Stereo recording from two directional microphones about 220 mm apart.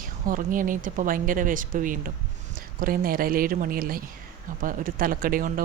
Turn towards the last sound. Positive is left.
turn(degrees=-40)  # may be behind; listen again after turning